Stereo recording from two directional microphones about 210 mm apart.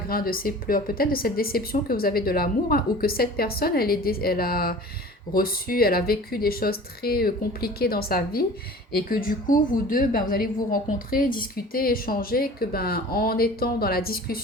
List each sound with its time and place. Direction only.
0.1 s a woman's voice: 45° left (ahead or behind)